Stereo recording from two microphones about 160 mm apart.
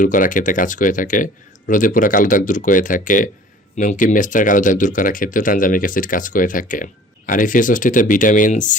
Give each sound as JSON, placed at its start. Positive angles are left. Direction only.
{"t": 0.0, "sound": "speech", "side_deg": 55}